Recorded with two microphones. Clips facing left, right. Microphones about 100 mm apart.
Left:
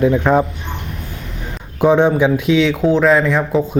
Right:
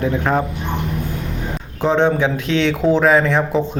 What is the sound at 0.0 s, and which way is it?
Speech, 15° left (ahead or behind).